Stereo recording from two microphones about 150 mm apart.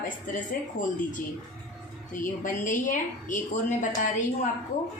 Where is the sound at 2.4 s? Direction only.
60° left (ahead or behind).